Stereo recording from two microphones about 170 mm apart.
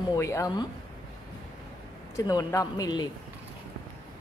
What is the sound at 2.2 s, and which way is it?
Speech, 20° left (ahead or behind).